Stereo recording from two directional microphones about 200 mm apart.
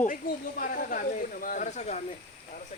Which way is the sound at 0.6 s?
45° left (ahead or behind).